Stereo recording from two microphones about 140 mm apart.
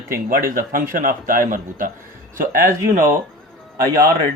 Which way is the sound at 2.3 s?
85° right.